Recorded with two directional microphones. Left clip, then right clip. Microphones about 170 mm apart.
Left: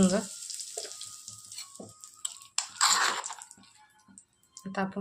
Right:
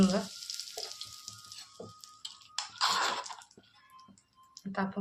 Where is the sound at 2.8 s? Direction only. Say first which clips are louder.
Left 4 dB; 35° left (ahead or behind).